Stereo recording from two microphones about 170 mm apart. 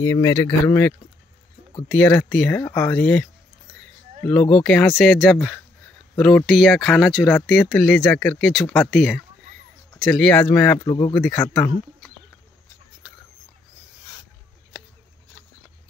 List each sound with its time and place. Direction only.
0.0 s speech: 20° left (ahead or behind)
10.9 s speech: 25° left (ahead or behind)
11.1 s speech: 5° left (ahead or behind)